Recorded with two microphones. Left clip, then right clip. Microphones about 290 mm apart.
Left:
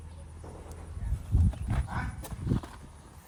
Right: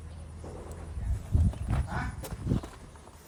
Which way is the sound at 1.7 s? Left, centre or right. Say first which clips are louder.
Right 2 dB; centre.